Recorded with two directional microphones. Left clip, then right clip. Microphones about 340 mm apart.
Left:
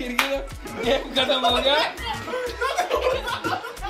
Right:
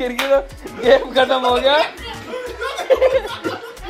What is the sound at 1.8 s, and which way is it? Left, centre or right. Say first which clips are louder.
Music: right 4 dB; centre.